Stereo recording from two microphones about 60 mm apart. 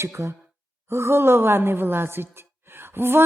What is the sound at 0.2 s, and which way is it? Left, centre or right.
A woman's voice, right.